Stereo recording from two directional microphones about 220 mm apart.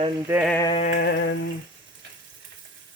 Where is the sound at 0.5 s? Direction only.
15° left (ahead or behind).